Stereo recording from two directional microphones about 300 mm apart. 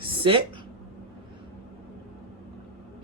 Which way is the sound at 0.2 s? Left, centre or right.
Centre.